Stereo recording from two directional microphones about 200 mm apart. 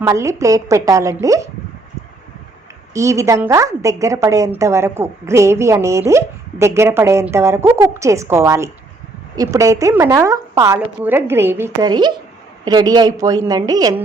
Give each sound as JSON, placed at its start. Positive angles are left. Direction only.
{"t": 0.0, "sound": "a woman's voice", "side_deg": -15}
{"t": 2.9, "sound": "a woman's voice", "side_deg": -15}